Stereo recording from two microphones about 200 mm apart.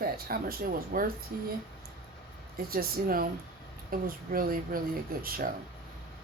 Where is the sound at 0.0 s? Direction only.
45° right (ahead or behind).